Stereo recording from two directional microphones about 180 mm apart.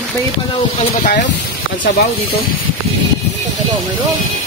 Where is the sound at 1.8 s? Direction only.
40° left (ahead or behind).